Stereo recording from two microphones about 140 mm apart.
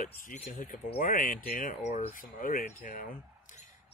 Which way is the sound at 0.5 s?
75° left (ahead or behind).